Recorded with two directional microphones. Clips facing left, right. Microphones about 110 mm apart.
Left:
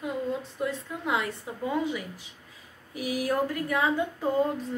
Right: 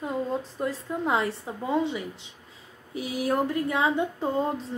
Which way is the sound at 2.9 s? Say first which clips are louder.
Right 1 dB; 25° right (ahead or behind).